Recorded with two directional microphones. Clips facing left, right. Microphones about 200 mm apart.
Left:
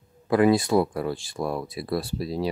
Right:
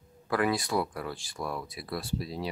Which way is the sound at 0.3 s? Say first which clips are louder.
Left 9 dB; 25° left (ahead or behind).